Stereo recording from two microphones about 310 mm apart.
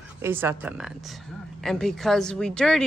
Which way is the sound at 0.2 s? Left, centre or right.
Centre.